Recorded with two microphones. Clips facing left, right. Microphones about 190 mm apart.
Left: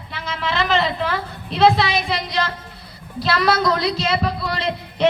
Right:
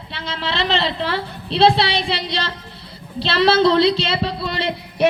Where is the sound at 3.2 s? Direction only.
30° right (ahead or behind).